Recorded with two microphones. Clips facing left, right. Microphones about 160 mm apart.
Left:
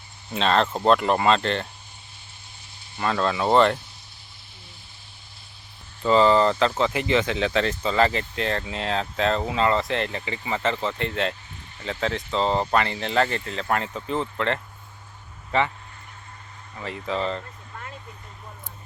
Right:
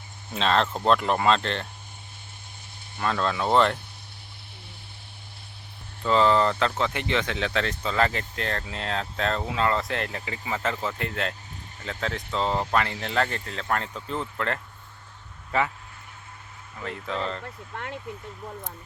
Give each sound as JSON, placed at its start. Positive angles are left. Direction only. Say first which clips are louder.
{"t": 0.3, "sound": "speech", "louder": "left 2 dB", "side_deg": 0}
{"t": 3.0, "sound": "speech", "louder": "left 2 dB", "side_deg": 5}
{"t": 6.0, "sound": "speech", "louder": "left 3 dB", "side_deg": 0}
{"t": 16.7, "sound": "speech", "louder": "left 3 dB", "side_deg": 0}
{"t": 17.4, "sound": "speech", "louder": "right 4 dB", "side_deg": -75}